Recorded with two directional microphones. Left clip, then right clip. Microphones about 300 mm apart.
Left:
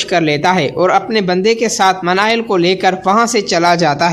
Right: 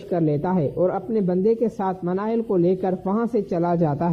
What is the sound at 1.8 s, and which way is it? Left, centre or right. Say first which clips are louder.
Speech: left 14 dB; centre.